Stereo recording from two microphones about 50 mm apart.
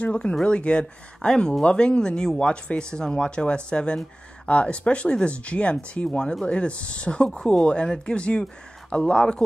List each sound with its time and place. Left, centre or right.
0.0 s speech: left